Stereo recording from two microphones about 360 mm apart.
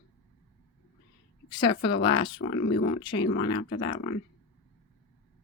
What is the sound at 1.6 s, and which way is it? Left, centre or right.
Speech, left.